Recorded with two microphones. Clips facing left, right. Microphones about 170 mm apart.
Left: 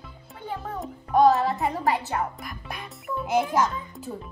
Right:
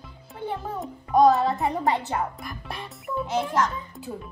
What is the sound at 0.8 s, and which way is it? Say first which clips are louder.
Music: right 1 dB; centre (ahead or behind).